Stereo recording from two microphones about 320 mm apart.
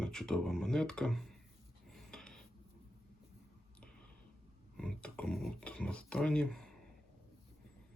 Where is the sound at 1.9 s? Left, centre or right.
Centre.